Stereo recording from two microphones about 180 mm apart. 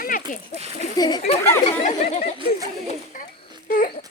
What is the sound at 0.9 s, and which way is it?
Speech, 20° left (ahead or behind).